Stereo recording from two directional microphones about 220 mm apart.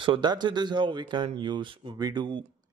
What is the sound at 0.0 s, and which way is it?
A man's voice, 20° right (ahead or behind).